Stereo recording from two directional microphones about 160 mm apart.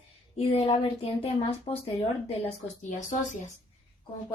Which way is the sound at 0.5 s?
40° left (ahead or behind).